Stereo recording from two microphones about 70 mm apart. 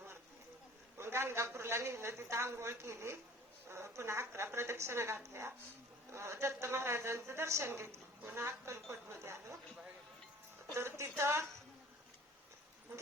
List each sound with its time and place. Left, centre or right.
0.9 s a woman's voice: right
10.8 s a woman's voice: right